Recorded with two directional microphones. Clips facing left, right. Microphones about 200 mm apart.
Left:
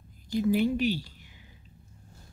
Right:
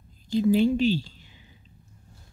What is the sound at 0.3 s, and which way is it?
A woman's voice, 25° right (ahead or behind).